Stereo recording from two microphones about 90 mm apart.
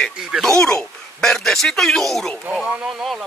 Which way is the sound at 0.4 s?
5° left (ahead or behind).